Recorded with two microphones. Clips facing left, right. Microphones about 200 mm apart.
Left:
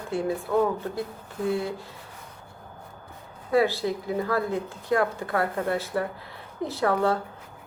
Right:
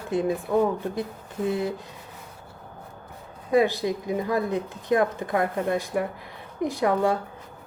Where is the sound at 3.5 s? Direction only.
15° right (ahead or behind).